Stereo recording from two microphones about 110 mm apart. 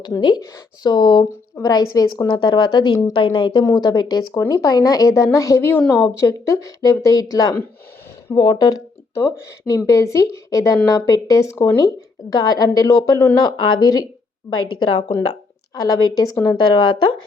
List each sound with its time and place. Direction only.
0.2 s speech: 40° left (ahead or behind)
1.6 s a woman's voice: 35° left (ahead or behind); by 3.6 s 50° left (ahead or behind)
3.6 s a woman's voice: 35° left (ahead or behind)
9.1 s a woman's voice: 25° left (ahead or behind); by 17.2 s 45° left (ahead or behind)